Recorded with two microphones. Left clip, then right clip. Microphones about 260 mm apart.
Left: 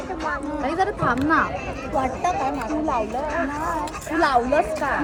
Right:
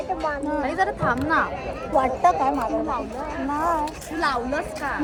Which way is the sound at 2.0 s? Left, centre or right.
Right.